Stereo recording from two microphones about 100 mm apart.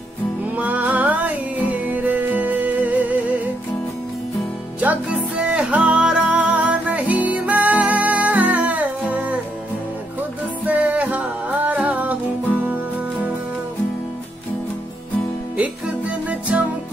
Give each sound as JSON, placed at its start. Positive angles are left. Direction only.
{"t": 0.6, "sound": "music", "side_deg": -15}
{"t": 4.8, "sound": "music", "side_deg": -15}
{"t": 10.6, "sound": "music", "side_deg": -15}
{"t": 15.5, "sound": "music", "side_deg": -15}